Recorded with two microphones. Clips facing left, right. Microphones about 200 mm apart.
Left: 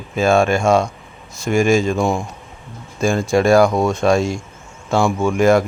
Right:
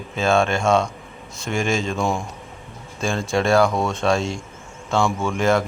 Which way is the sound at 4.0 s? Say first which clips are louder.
Left 5 dB; 10° left (ahead or behind).